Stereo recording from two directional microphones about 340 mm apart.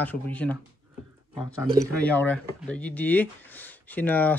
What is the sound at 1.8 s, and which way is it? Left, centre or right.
Speech, centre.